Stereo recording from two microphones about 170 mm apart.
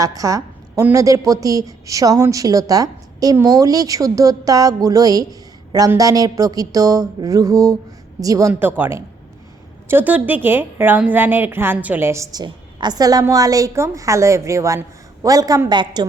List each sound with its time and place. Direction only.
0.0 s a woman's voice: 20° right (ahead or behind)